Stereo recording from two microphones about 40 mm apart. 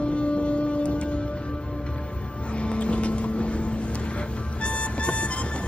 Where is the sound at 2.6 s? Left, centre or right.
Left.